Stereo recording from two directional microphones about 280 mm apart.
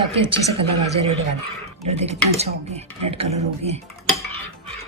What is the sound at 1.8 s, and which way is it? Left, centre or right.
Speech, right.